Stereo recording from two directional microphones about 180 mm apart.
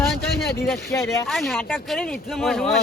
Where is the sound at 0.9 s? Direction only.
15° left (ahead or behind).